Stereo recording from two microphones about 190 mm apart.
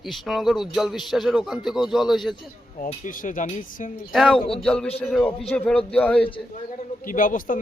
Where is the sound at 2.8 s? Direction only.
45° left (ahead or behind).